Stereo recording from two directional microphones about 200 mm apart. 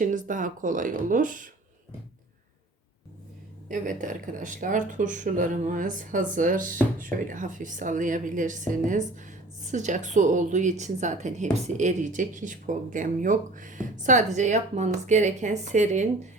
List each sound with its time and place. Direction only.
0.0 s speech: 40° right (ahead or behind)
3.7 s speech: 40° right (ahead or behind)